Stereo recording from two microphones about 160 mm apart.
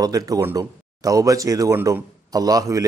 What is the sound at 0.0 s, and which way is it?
Speech, 20° right (ahead or behind).